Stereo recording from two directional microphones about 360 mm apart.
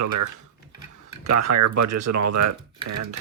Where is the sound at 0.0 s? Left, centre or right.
Right.